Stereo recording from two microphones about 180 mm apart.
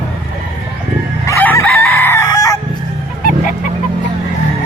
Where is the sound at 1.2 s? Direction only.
10° left (ahead or behind).